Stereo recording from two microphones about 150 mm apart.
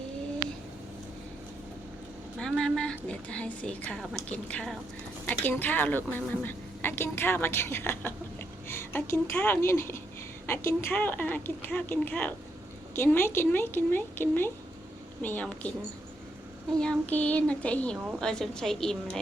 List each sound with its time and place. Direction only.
2.4 s a woman's voice: 5° left (ahead or behind)
16.8 s a woman's voice: 10° left (ahead or behind)